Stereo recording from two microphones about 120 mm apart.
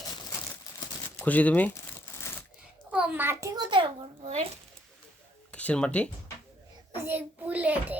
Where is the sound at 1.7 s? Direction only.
25° left (ahead or behind).